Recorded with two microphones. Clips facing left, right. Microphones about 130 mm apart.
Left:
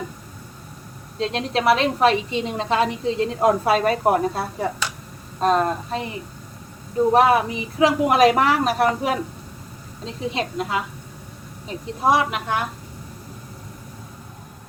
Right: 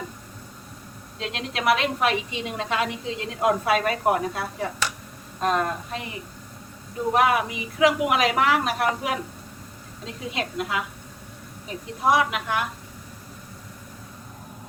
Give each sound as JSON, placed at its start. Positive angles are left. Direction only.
{"t": 1.2, "sound": "a woman's voice", "side_deg": 35}
{"t": 7.1, "sound": "a woman's voice", "side_deg": 30}
{"t": 12.0, "sound": "a woman's voice", "side_deg": 30}